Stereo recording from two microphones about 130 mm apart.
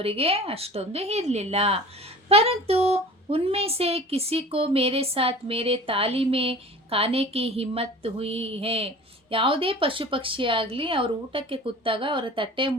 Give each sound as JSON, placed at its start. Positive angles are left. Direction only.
{"t": 0.0, "sound": "speech", "side_deg": -45}